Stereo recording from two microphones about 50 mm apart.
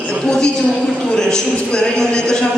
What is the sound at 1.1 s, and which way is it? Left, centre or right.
Speech, centre.